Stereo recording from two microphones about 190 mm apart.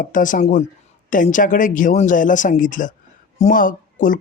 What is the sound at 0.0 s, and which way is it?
Speech, 45° left (ahead or behind).